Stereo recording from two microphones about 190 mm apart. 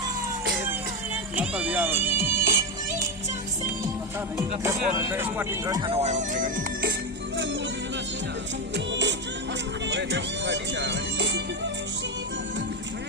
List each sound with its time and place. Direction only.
1.4 s speech: 10° right (ahead or behind)
4.6 s speech: 10° right (ahead or behind)
5.9 s music: 35° right (ahead or behind)
8.7 s music: 70° right (ahead or behind)
9.8 s speech: 70° right (ahead or behind)